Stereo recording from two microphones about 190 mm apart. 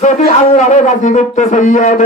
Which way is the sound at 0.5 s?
40° left (ahead or behind).